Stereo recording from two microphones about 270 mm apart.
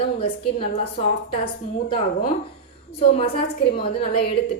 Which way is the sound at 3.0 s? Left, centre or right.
Left.